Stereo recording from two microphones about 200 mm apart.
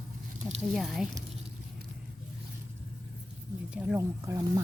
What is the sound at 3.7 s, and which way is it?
Speech, 10° right (ahead or behind).